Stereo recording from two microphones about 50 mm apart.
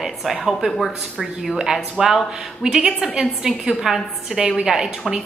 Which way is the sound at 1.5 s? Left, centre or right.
Centre.